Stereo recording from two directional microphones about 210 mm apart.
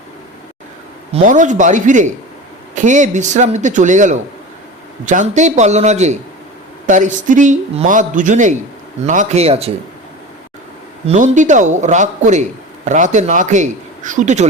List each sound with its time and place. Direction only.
1.1 s a man's voice: 35° right (ahead or behind)
11.0 s a man's voice: 35° right (ahead or behind)